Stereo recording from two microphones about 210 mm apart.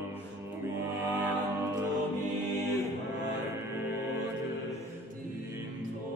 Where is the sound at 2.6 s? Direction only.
10° left (ahead or behind).